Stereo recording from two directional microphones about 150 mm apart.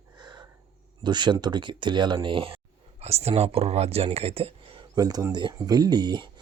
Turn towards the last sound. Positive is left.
turn(degrees=-30)  # may be behind; listen again after turning